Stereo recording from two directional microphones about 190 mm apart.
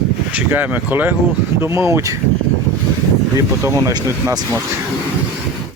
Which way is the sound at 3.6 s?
15° right (ahead or behind).